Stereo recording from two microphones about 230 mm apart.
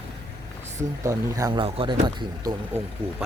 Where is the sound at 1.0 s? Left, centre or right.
Centre.